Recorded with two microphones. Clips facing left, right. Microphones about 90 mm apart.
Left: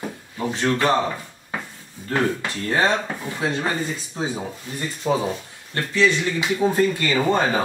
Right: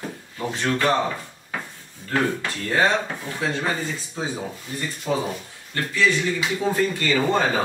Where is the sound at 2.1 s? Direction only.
20° left (ahead or behind).